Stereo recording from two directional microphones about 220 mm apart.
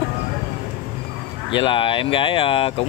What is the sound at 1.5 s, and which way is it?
Speech, 20° left (ahead or behind).